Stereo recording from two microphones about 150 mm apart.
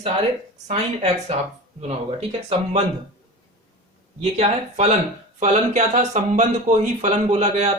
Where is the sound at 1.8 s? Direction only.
40° right (ahead or behind).